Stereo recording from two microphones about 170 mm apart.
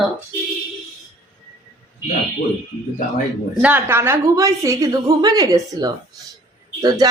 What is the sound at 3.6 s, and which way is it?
A woman's voice, 10° right (ahead or behind).